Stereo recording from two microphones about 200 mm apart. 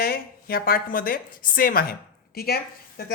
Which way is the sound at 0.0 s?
50° left (ahead or behind).